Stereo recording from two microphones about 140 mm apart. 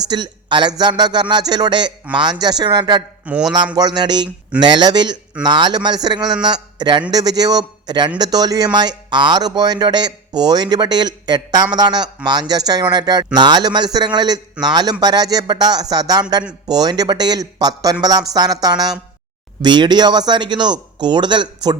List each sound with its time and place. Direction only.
0.1 s speech: 30° right (ahead or behind)
3.2 s a man's voice: 10° right (ahead or behind)
3.8 s a man's voice: 30° right (ahead or behind)